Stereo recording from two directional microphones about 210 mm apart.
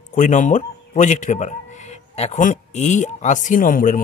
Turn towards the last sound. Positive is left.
turn(degrees=40)  # may be behind; listen again after turning